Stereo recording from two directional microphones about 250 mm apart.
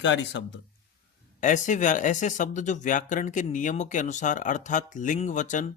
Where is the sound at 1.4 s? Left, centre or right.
Left.